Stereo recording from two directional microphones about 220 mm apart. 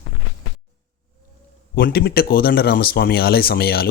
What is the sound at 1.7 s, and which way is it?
Speech, 45° left (ahead or behind).